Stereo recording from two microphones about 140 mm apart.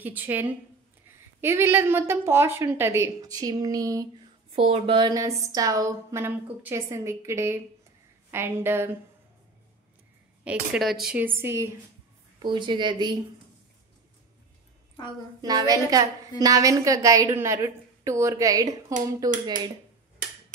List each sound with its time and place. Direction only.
0.0 s a woman's voice: 10° right (ahead or behind)
4.6 s a woman's voice: 45° right (ahead or behind); by 8.9 s 15° right (ahead or behind)
10.4 s a woman's voice: 10° right (ahead or behind)
12.4 s speech: 35° right (ahead or behind)
15.4 s a woman's voice: 25° right (ahead or behind)